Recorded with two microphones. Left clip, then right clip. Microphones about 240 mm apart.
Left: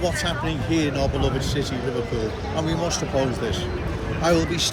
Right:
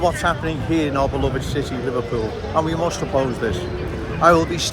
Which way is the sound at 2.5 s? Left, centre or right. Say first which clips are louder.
Right 6 dB; centre.